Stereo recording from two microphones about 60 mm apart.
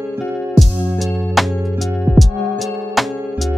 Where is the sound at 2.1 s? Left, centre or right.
Right.